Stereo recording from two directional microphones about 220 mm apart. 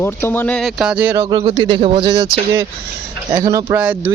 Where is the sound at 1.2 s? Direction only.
20° right (ahead or behind).